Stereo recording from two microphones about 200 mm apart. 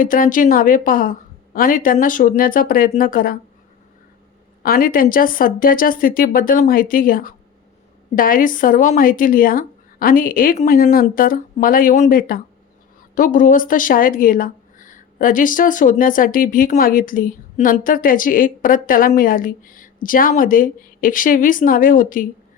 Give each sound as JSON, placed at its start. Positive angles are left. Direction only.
{"t": 0.0, "sound": "speech", "side_deg": 45}
{"t": 4.6, "sound": "speech", "side_deg": 45}